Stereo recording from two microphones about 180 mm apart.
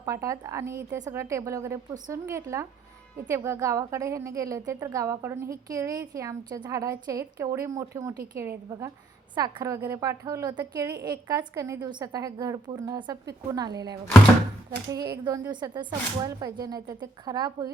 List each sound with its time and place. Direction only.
0.0 s a woman's voice: 15° right (ahead or behind)
15.1 s a woman's voice: 20° right (ahead or behind)